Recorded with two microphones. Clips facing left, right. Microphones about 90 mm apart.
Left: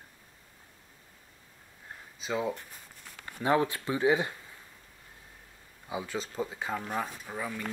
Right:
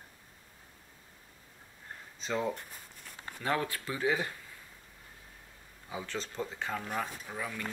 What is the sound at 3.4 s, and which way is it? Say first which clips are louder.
Speech: left 6 dB; 20° left (ahead or behind).